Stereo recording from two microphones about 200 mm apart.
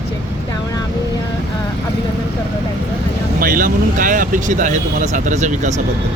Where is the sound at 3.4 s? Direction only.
45° right (ahead or behind).